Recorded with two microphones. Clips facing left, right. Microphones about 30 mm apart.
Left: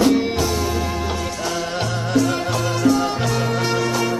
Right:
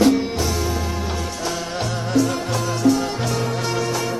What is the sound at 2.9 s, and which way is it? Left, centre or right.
Music, left.